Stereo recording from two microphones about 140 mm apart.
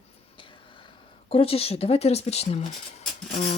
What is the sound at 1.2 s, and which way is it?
Speech, 45° left (ahead or behind).